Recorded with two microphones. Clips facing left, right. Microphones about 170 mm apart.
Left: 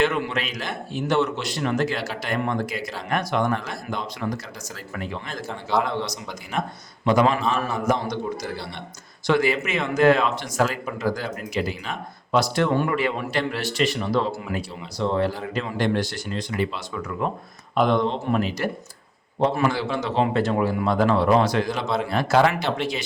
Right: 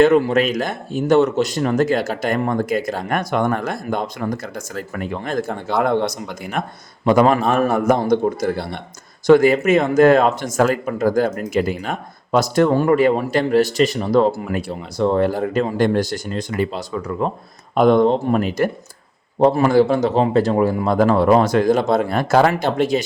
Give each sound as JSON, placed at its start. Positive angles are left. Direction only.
{"t": 0.0, "sound": "speech", "side_deg": -40}
{"t": 17.7, "sound": "speech", "side_deg": -50}